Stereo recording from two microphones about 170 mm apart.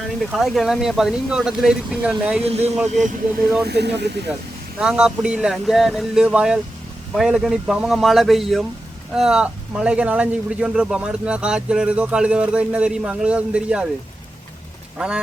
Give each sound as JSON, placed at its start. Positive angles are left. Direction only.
{"t": 0.2, "sound": "speech", "side_deg": 0}
{"t": 2.4, "sound": "speech", "side_deg": -40}
{"t": 3.6, "sound": "speech", "side_deg": -75}
{"t": 4.8, "sound": "speech", "side_deg": -5}
{"t": 14.9, "sound": "quack", "side_deg": -5}